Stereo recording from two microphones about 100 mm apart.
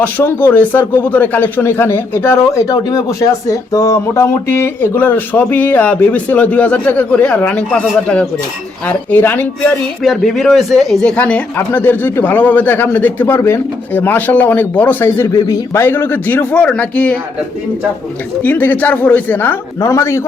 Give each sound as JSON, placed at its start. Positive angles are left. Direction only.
{"t": 0.0, "sound": "speech", "side_deg": 15}
{"t": 10.0, "sound": "a man's voice", "side_deg": 0}
{"t": 11.2, "sound": "speech", "side_deg": 15}
{"t": 15.4, "sound": "speech", "side_deg": 30}
{"t": 18.4, "sound": "speech", "side_deg": 15}